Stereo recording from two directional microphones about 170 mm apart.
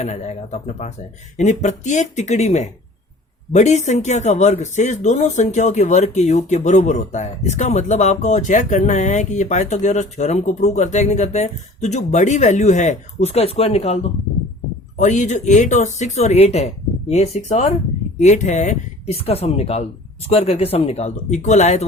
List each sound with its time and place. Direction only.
0.0 s speech: 45° left (ahead or behind)